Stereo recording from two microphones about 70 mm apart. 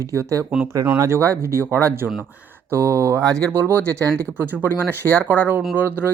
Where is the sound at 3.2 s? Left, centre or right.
Right.